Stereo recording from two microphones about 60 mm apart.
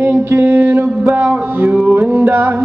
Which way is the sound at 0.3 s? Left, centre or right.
Right.